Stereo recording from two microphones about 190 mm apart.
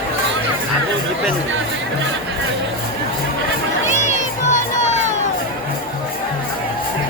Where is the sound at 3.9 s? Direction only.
40° left (ahead or behind).